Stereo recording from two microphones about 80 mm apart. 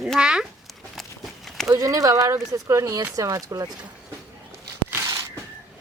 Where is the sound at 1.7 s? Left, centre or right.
Right.